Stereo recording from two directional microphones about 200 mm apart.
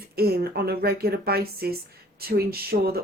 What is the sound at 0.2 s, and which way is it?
Speech, 50° right (ahead or behind).